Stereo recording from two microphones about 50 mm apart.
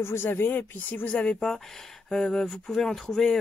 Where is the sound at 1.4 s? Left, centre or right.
Centre.